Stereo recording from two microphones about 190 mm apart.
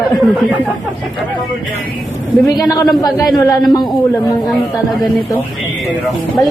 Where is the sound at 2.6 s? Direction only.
20° left (ahead or behind).